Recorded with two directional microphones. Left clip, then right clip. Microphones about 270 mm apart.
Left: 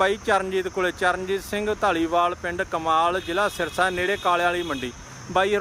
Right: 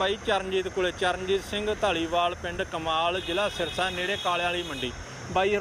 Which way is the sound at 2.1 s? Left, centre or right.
Left.